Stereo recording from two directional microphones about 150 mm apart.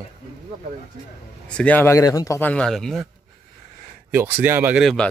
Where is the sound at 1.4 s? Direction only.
10° left (ahead or behind).